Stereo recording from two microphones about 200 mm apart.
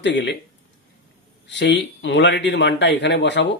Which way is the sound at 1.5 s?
60° left (ahead or behind).